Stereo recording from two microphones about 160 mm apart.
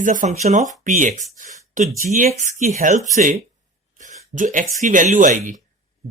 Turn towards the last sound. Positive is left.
turn(degrees=-55)  # may be behind; listen again after turning